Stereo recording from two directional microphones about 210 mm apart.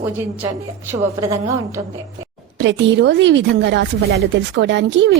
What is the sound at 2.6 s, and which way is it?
Speech, 60° right (ahead or behind).